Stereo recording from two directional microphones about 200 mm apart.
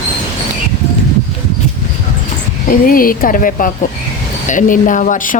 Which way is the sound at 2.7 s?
45° left (ahead or behind).